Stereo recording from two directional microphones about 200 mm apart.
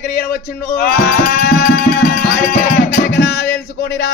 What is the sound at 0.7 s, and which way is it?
Music, 50° left (ahead or behind).